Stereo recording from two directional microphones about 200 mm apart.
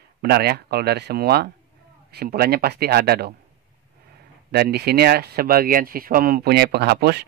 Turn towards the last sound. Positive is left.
turn(degrees=-55)  # may be behind; listen again after turning